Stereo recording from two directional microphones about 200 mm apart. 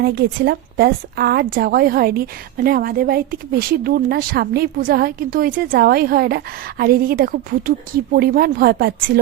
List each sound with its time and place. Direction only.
0.0 s a woman's voice: 55° right (ahead or behind)